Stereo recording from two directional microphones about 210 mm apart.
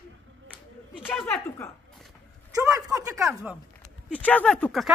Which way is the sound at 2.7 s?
15° right (ahead or behind).